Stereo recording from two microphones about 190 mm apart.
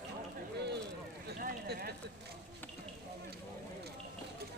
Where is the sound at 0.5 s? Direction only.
60° right (ahead or behind).